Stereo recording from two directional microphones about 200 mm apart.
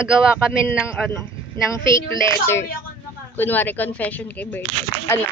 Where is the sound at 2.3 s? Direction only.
15° left (ahead or behind).